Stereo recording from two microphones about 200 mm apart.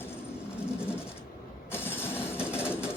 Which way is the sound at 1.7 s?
10° left (ahead or behind).